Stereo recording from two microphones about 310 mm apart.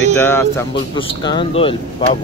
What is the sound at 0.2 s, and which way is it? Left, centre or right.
Speech, centre.